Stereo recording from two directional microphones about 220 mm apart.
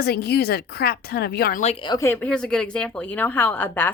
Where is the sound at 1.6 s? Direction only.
25° left (ahead or behind).